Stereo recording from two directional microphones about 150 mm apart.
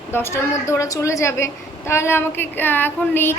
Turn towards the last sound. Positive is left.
turn(degrees=15)  # may be behind; listen again after turning